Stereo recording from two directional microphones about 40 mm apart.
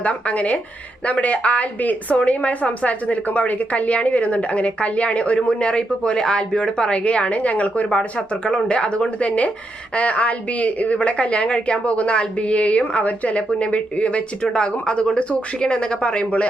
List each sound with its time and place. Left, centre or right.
0.0 s a woman's voice: left
14.5 s speech: left